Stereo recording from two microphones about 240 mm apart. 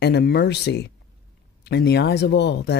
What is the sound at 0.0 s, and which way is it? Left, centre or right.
Speech, left.